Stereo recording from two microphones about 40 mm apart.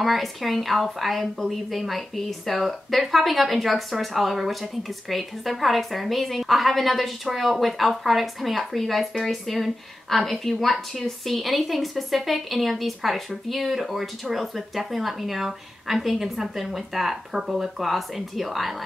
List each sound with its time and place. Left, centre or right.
0.0 s a woman's voice: centre